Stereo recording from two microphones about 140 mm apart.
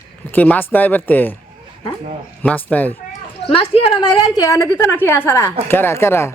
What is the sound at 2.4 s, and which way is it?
Speech, 10° left (ahead or behind).